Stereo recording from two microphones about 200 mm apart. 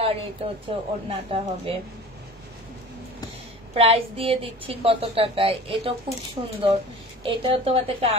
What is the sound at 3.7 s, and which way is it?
A woman's voice, 30° right (ahead or behind).